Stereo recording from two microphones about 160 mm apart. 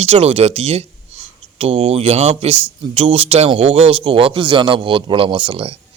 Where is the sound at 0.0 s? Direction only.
40° right (ahead or behind).